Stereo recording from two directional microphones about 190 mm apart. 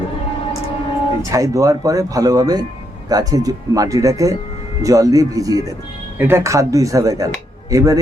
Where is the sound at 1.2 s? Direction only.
15° right (ahead or behind).